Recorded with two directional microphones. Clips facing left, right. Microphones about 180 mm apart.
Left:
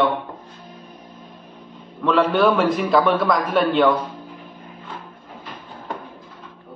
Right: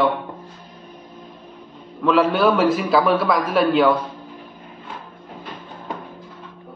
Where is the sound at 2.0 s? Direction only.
5° right (ahead or behind).